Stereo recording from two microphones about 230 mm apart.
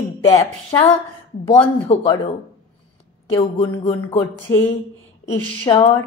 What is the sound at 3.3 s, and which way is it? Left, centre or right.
Speech, left.